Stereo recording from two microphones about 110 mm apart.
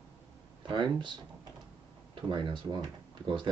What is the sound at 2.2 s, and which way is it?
Speech, 45° right (ahead or behind).